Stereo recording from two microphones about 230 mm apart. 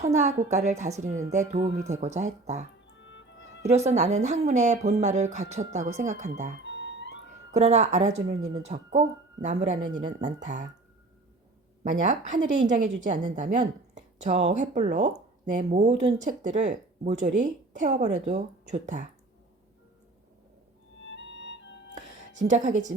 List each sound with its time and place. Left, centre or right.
0.1 s speech: right
3.7 s speech: right
6.6 s music: left
7.5 s speech: right
8.4 s speech: centre
8.6 s speech: right
11.8 s a woman's voice: right
21.4 s music: left
21.9 s music: right